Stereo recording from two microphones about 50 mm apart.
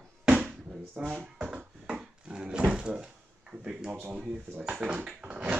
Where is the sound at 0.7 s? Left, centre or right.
Centre.